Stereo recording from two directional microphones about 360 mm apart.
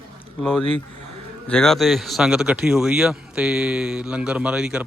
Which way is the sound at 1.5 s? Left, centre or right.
Centre.